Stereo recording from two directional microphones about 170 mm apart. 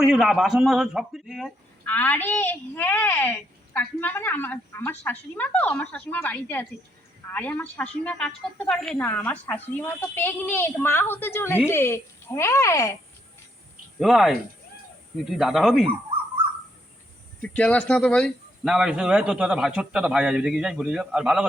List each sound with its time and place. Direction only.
0.0 s speech: 5° right (ahead or behind)
1.8 s a woman's voice: 10° left (ahead or behind)
14.0 s speech: centre (ahead or behind)
17.4 s speech: 10° left (ahead or behind)